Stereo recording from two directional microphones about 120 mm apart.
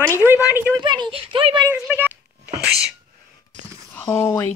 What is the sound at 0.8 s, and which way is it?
Speech, 40° right (ahead or behind).